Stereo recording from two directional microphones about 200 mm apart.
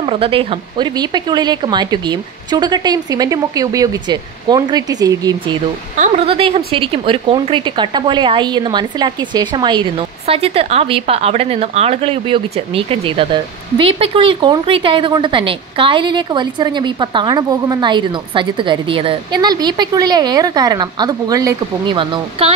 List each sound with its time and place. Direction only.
0.0 s a woman's voice: 25° right (ahead or behind)
5.9 s a woman's voice: 30° right (ahead or behind)